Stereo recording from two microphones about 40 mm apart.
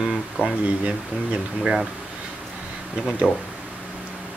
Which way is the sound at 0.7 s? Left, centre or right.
Right.